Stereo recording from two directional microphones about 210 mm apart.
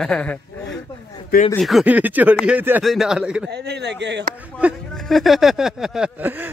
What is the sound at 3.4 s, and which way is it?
Speech, 50° right (ahead or behind).